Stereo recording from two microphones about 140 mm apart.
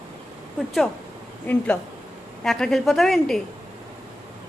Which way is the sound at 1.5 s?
10° left (ahead or behind).